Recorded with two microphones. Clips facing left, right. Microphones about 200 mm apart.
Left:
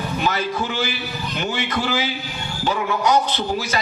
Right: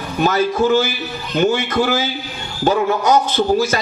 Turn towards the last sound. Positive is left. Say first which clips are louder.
# right 7 dB
turn(degrees=-45)  # may be behind; listen again after turning